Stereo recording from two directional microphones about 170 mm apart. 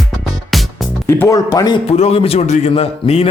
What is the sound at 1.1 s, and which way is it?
Speech, 15° left (ahead or behind).